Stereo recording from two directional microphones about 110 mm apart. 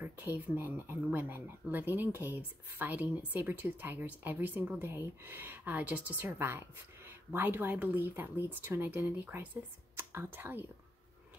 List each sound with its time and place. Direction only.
0.0 s speech: 20° right (ahead or behind)